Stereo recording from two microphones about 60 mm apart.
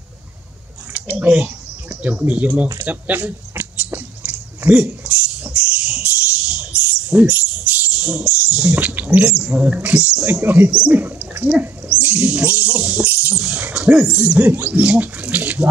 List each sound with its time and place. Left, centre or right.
0.9 s speech: right
2.8 s a sound: right
8.0 s speech: right
10.2 s speech: right
10.7 s speech: centre
11.0 s speech: right